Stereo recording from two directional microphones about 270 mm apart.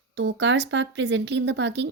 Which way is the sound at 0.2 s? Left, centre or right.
Right.